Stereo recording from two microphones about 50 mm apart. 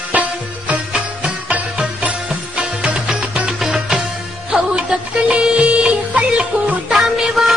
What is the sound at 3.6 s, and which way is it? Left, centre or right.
Music, centre.